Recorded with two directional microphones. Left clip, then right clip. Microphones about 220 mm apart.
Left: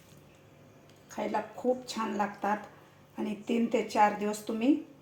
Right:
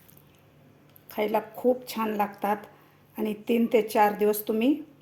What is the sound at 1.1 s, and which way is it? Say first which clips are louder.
A woman's voice: right 6 dB; 40° right (ahead or behind).